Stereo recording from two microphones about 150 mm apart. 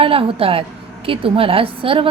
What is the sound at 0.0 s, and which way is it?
Speech, 40° right (ahead or behind).